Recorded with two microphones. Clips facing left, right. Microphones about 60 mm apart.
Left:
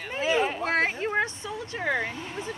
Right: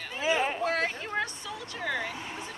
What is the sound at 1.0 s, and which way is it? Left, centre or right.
A woman's voice, left.